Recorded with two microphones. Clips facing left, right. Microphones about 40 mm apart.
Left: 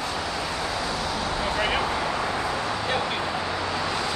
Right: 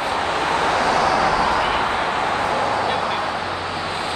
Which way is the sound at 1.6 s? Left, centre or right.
Right.